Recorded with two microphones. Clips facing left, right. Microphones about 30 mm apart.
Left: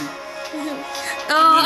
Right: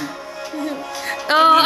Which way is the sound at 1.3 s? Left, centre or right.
Centre.